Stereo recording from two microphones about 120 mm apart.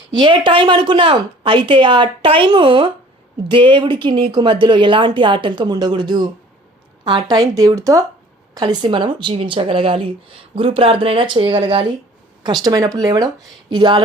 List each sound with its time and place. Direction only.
0.1 s a woman's voice: 40° right (ahead or behind)